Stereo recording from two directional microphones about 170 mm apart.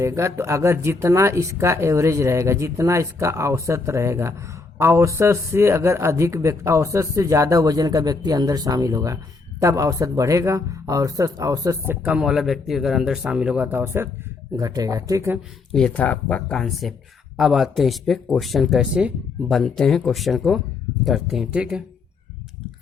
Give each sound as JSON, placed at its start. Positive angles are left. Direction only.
{"t": 0.0, "sound": "speech", "side_deg": -15}
{"t": 15.7, "sound": "speech", "side_deg": 5}